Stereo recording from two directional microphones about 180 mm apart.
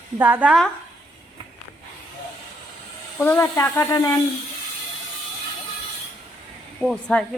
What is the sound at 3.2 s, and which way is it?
Speech, 15° left (ahead or behind).